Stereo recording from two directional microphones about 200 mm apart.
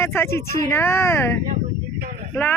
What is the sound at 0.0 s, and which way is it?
Speech, 10° left (ahead or behind).